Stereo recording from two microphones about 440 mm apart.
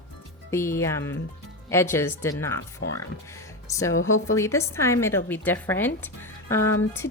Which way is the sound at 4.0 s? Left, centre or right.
Left.